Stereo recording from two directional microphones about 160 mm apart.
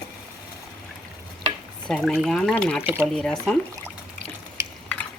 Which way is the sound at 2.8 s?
15° right (ahead or behind).